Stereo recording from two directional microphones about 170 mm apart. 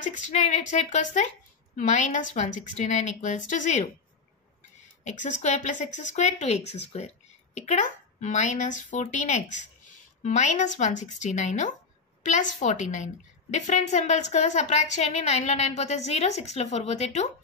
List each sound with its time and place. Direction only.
0.0 s speech: 45° left (ahead or behind)
5.0 s a woman's voice: 45° left (ahead or behind)